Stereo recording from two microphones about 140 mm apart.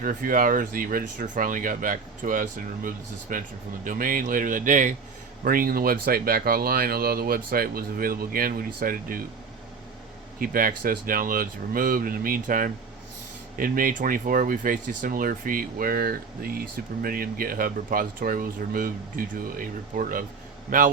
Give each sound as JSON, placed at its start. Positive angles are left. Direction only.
{"t": 0.0, "sound": "speech", "side_deg": -80}
{"t": 3.8, "sound": "speech", "side_deg": -85}
{"t": 5.5, "sound": "speech", "side_deg": -90}
{"t": 10.4, "sound": "speech", "side_deg": -85}